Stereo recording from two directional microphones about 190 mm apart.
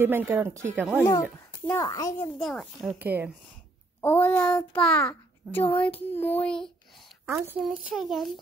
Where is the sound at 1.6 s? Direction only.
15° left (ahead or behind).